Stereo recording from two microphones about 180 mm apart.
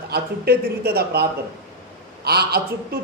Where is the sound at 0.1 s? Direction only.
60° right (ahead or behind).